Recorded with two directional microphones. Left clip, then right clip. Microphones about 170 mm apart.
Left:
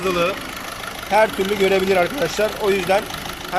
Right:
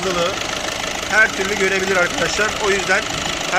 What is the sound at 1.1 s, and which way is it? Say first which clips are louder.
Speech: right 1 dB; 20° left (ahead or behind).